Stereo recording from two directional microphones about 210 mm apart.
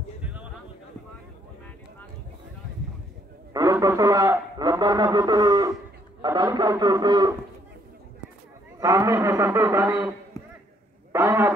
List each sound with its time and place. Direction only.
3.5 s a man's voice: 15° right (ahead or behind)
8.7 s a man's voice: 15° right (ahead or behind)